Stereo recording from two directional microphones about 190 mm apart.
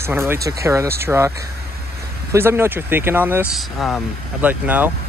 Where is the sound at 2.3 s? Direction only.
15° right (ahead or behind).